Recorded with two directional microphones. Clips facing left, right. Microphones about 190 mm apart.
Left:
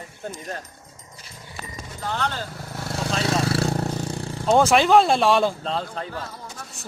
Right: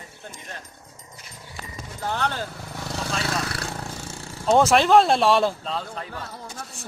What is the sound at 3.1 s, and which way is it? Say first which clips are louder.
Vehicle: left 7 dB; 25° left (ahead or behind).